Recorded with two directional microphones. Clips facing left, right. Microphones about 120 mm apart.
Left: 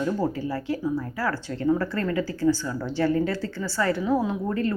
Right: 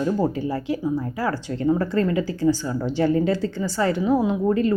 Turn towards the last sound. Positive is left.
turn(degrees=-15)  # may be behind; listen again after turning